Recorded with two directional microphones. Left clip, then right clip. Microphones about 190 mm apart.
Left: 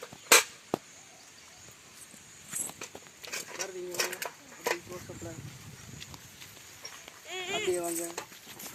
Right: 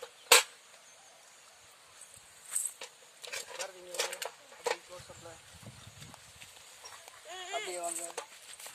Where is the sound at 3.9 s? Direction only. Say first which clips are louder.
Left 2 dB; 30° right (ahead or behind).